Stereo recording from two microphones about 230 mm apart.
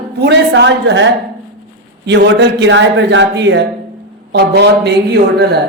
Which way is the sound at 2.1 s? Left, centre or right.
Right.